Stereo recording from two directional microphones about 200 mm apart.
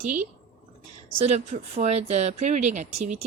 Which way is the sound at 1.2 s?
35° right (ahead or behind).